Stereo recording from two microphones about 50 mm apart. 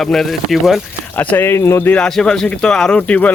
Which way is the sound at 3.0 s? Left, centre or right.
Left.